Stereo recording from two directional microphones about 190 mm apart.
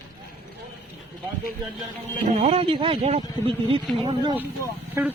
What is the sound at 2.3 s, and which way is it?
Speech, 35° right (ahead or behind).